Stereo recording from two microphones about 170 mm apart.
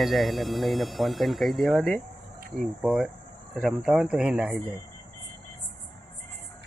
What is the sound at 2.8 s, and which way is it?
Speech, centre (ahead or behind).